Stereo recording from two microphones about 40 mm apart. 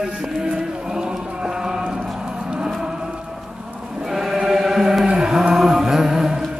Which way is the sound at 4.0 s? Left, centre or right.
Centre.